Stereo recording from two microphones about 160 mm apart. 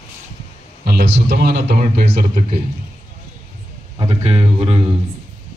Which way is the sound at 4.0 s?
35° right (ahead or behind).